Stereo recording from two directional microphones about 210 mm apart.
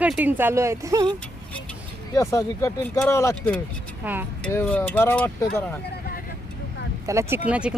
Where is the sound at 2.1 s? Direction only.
15° left (ahead or behind).